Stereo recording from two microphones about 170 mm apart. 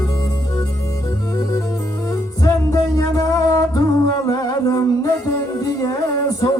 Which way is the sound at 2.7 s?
20° left (ahead or behind).